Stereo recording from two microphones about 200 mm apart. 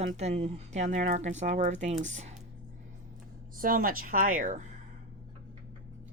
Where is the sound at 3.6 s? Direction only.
45° right (ahead or behind).